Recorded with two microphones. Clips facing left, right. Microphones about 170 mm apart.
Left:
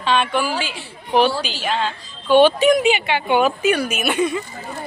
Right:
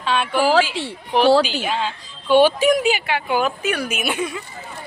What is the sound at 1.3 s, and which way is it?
Speech, 65° right (ahead or behind).